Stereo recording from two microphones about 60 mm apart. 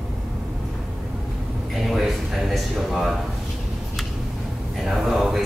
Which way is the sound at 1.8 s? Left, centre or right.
Centre.